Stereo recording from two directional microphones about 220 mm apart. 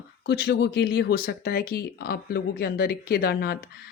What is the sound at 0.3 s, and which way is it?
Speech, 50° left (ahead or behind).